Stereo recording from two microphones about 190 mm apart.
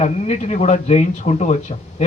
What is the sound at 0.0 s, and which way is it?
A man's voice, 35° left (ahead or behind).